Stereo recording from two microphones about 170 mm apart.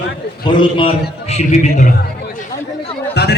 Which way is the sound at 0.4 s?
30° left (ahead or behind).